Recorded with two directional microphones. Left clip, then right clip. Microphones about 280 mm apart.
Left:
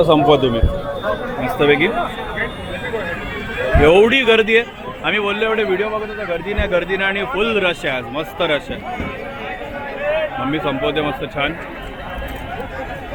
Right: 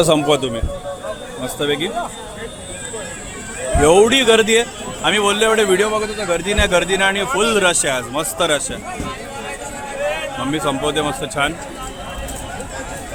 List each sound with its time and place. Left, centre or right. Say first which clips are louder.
0.0 s speech: left 3 dB; centre
3.8 s speech: even; centre
10.5 s speech: right 3 dB; centre